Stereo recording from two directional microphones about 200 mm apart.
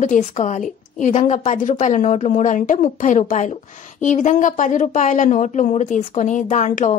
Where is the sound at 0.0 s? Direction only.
35° left (ahead or behind).